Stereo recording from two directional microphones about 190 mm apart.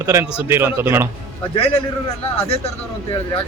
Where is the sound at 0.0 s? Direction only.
15° right (ahead or behind).